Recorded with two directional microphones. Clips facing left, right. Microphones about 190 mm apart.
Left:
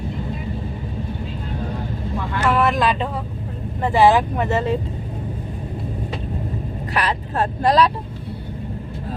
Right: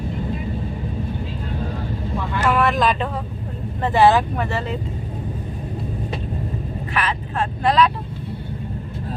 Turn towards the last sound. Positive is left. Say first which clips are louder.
# left 1 dB
turn(degrees=40)  # may be behind; listen again after turning